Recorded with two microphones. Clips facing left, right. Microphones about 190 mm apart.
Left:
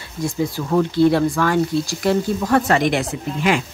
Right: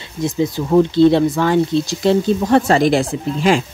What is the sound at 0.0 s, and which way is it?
Speech, 20° right (ahead or behind).